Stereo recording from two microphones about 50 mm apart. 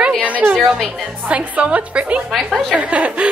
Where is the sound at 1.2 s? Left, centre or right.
Right.